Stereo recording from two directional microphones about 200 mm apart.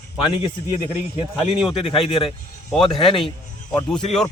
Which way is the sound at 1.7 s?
25° left (ahead or behind).